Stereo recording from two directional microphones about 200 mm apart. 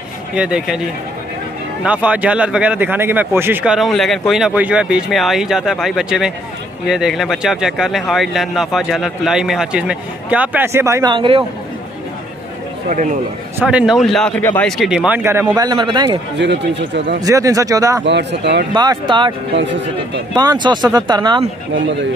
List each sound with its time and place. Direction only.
0.3 s speech: 5° right (ahead or behind); by 11.4 s 25° right (ahead or behind)
12.9 s a man's voice: 40° right (ahead or behind)
13.6 s speech: 5° right (ahead or behind); by 16.2 s 25° right (ahead or behind)
16.3 s speech: 60° right (ahead or behind)
17.2 s speech: 15° right (ahead or behind)
18.0 s speech: 60° right (ahead or behind)
18.7 s speech: 20° right (ahead or behind)
20.3 s speech: 20° right (ahead or behind)